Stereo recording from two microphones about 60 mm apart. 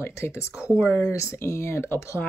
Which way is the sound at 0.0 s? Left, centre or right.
Left.